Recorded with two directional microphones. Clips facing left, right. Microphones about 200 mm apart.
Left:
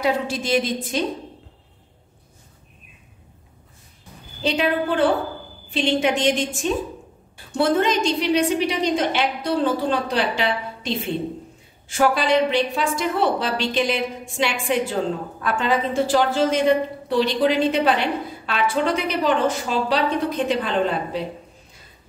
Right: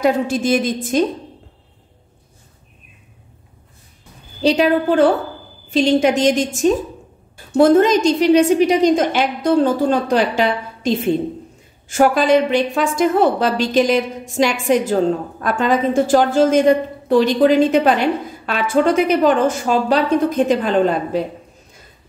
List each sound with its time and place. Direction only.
0.0 s a woman's voice: 50° right (ahead or behind)
4.4 s a woman's voice: 40° right (ahead or behind)